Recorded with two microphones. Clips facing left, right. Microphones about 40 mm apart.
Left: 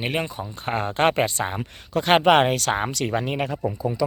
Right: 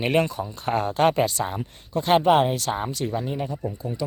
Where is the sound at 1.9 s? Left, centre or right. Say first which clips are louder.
Left 2 dB; left.